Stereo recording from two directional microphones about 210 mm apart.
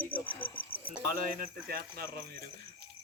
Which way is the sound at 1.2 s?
45° right (ahead or behind).